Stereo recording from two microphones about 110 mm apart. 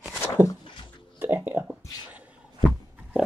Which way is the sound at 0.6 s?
50° left (ahead or behind).